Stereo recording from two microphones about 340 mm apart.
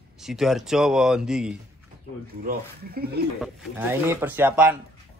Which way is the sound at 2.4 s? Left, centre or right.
Right.